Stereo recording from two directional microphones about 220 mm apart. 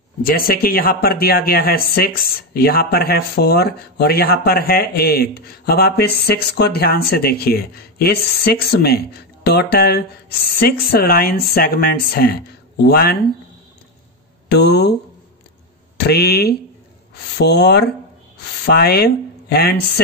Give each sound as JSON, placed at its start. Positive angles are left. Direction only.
{"t": 0.2, "sound": "speech", "side_deg": 40}
{"t": 14.5, "sound": "speech", "side_deg": 50}
{"t": 16.0, "sound": "speech", "side_deg": 45}